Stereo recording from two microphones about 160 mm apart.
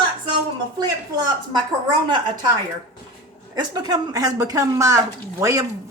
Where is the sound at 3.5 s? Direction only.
25° right (ahead or behind).